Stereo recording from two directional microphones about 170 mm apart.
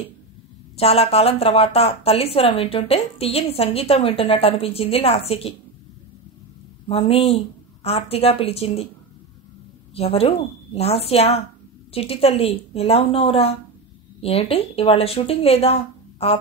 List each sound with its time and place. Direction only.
0.7 s speech: 35° left (ahead or behind)
6.9 s speech: 35° left (ahead or behind)
9.9 s speech: 35° left (ahead or behind)